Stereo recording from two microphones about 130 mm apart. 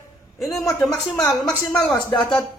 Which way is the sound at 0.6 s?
20° left (ahead or behind).